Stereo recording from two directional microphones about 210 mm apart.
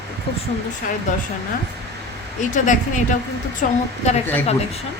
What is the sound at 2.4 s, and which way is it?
A woman's voice, 35° left (ahead or behind).